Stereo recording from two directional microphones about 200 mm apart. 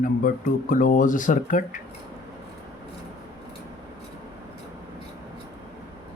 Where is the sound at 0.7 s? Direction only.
40° left (ahead or behind).